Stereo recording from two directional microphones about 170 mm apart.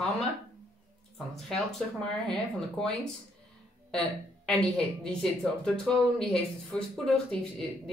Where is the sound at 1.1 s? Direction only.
Centre (ahead or behind).